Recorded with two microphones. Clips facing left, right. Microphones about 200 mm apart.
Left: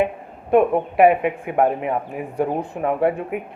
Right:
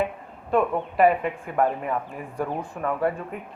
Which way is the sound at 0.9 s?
60° left (ahead or behind).